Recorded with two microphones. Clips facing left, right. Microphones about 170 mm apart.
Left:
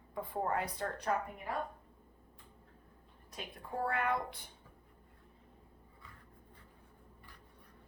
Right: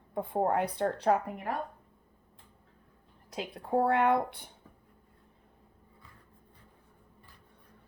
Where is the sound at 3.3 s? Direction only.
80° right; by 4.4 s 65° right (ahead or behind).